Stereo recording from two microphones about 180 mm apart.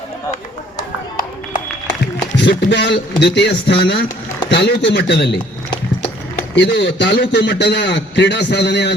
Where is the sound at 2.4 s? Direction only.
70° left (ahead or behind).